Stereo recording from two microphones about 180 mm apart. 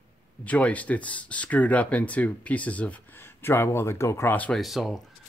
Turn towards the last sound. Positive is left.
turn(degrees=0)  # may be behind; listen again after turning